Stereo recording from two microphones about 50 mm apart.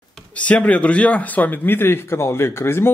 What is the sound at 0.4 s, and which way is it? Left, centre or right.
A man's voice, left.